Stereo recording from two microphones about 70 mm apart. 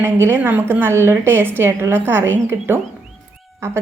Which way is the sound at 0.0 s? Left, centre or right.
Right.